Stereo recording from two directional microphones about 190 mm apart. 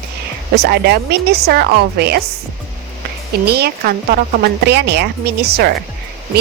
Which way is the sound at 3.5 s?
55° right (ahead or behind).